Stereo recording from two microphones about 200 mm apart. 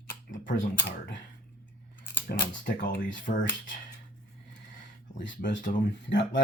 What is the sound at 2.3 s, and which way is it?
Speech, 50° left (ahead or behind).